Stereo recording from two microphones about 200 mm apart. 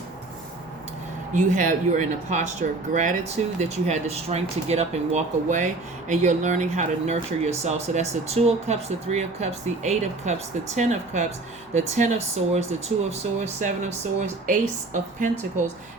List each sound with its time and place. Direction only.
1.3 s speech: 40° right (ahead or behind)